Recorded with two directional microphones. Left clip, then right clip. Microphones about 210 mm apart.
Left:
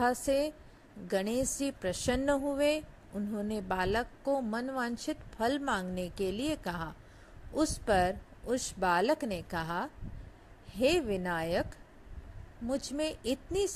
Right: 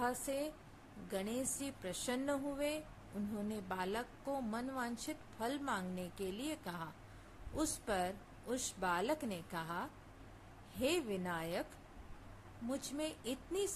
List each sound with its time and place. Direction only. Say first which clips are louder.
0.0 s a woman's voice: left 10 dB; 25° left (ahead or behind)
12.6 s a woman's voice: left 8 dB; 25° left (ahead or behind)